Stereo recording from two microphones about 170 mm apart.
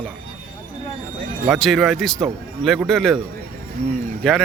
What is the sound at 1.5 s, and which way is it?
Speech, centre (ahead or behind).